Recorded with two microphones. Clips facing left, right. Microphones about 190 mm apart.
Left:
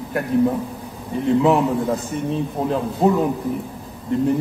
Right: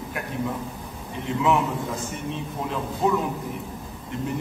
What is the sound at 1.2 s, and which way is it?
A man's voice, 35° left (ahead or behind).